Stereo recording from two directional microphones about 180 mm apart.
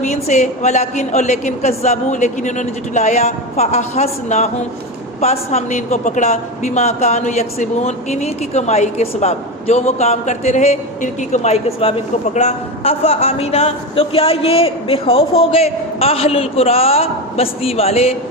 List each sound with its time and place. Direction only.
0.0 s a woman's voice: 40° left (ahead or behind)